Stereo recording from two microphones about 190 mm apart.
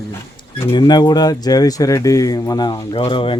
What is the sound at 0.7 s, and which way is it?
Speech, 20° left (ahead or behind).